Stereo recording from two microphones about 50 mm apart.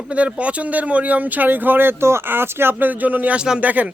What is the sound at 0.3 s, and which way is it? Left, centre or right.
Speech, right.